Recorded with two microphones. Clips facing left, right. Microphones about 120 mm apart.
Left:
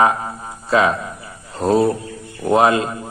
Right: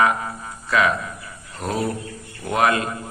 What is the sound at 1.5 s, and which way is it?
Mantra, 30° left (ahead or behind).